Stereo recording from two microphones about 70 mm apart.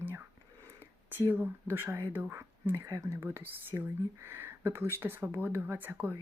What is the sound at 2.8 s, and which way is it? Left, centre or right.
Speech, right.